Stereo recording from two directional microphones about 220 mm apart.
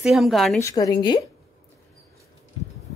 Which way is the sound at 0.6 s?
15° left (ahead or behind).